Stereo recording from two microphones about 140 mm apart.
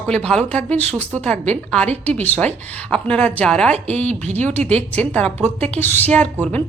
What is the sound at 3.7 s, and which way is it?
Speech, 50° right (ahead or behind).